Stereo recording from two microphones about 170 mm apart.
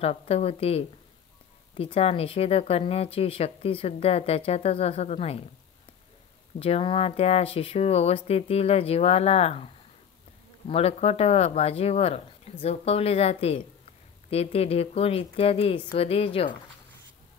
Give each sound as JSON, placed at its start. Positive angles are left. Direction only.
{"t": 0.0, "sound": "speech", "side_deg": 35}
{"t": 6.6, "sound": "speech", "side_deg": 35}
{"t": 10.7, "sound": "speech", "side_deg": 35}